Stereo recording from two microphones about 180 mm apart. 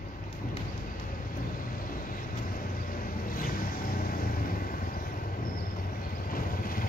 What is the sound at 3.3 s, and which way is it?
Vehicle, 50° left (ahead or behind).